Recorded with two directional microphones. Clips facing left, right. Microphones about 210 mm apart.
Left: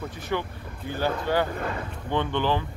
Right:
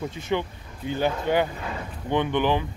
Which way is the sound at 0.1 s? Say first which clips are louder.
Right 3 dB; 20° right (ahead or behind).